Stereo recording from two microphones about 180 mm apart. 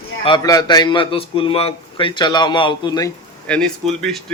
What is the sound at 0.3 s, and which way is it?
A man's voice, 25° left (ahead or behind).